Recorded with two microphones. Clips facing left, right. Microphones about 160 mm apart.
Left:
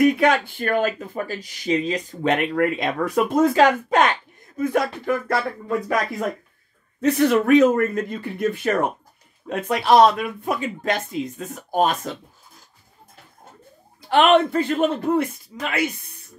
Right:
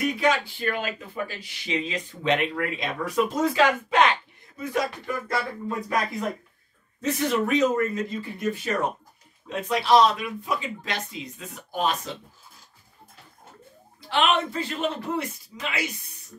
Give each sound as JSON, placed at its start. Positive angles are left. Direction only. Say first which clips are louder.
{"t": 0.0, "sound": "speech", "louder": "left 7 dB", "side_deg": 55}
{"t": 14.0, "sound": "speech", "louder": "left 8 dB", "side_deg": 55}